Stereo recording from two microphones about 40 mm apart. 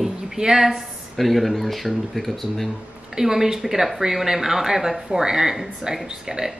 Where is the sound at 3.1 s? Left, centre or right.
Centre.